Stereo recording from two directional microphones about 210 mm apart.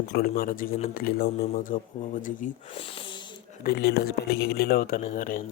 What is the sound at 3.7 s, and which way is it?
Speech, 50° left (ahead or behind).